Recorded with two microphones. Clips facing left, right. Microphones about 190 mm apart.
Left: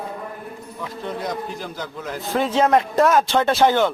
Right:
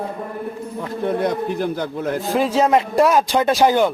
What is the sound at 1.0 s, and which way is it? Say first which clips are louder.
A man's voice: right 8 dB; 55° right (ahead or behind).